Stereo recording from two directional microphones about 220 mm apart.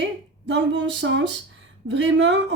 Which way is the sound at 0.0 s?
55° right (ahead or behind).